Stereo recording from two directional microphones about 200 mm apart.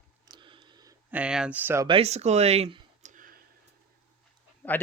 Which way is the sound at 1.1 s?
5° right (ahead or behind).